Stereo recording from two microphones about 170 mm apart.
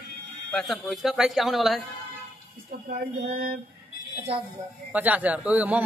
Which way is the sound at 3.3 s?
60° right (ahead or behind).